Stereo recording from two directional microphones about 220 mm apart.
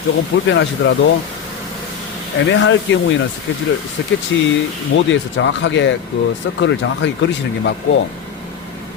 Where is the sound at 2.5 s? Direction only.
55° left (ahead or behind).